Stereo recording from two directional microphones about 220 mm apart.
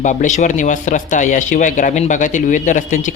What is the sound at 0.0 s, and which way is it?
A man's voice, 35° left (ahead or behind).